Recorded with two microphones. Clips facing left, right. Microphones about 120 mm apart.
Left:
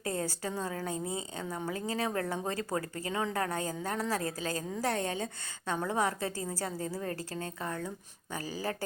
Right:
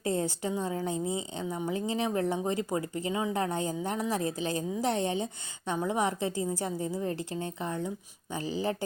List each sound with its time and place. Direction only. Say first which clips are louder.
0.0 s speech: right 4 dB; 25° right (ahead or behind)